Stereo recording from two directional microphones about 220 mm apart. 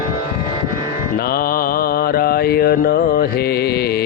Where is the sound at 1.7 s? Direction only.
45° left (ahead or behind).